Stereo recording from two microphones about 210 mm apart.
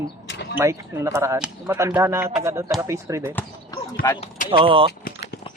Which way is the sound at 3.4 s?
15° left (ahead or behind).